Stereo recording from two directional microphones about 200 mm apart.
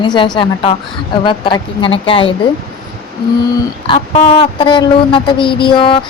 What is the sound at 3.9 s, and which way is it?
Speech, 25° left (ahead or behind).